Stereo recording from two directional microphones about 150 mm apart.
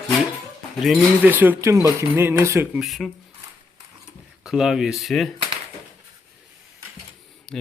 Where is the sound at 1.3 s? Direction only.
10° right (ahead or behind).